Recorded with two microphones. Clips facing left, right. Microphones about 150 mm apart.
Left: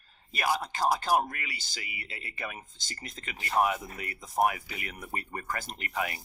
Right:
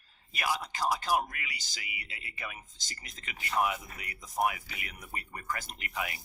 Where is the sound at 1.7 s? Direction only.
35° left (ahead or behind).